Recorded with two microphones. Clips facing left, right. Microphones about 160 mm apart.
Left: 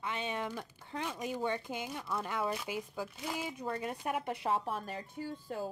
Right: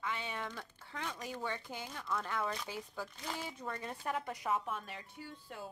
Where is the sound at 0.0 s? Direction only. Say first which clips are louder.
Left 4 dB; 20° left (ahead or behind).